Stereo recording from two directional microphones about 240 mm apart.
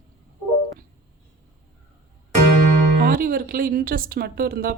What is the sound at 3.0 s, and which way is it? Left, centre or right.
Speech, right.